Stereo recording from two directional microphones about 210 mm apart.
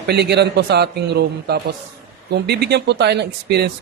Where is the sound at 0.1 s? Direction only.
50° right (ahead or behind).